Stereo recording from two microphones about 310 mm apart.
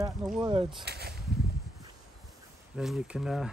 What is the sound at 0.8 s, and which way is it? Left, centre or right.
Speech, right.